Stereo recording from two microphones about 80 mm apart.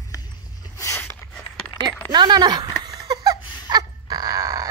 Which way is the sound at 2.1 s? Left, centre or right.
Right.